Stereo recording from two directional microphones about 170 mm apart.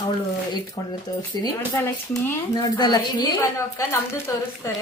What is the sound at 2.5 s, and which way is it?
Speech, 25° left (ahead or behind).